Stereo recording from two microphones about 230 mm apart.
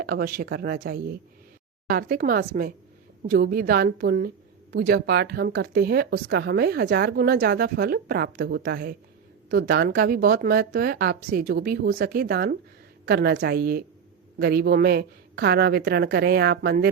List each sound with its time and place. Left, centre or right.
0.0 s speech: right